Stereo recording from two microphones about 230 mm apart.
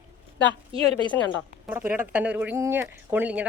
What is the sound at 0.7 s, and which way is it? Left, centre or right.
Speech, right.